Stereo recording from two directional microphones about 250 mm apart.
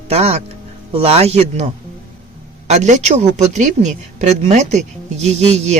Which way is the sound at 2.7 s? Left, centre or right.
Right.